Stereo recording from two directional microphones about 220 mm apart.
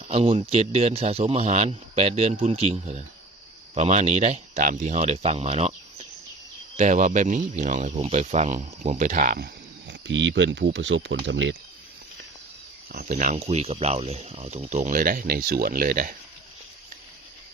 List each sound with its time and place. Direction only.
0.1 s speech: 25° right (ahead or behind)
6.7 s speech: 35° right (ahead or behind); by 11.5 s 55° right (ahead or behind)
12.9 s speech: 35° right (ahead or behind)